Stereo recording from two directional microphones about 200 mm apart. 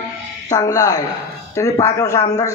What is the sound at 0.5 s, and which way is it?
A man's voice, 20° left (ahead or behind).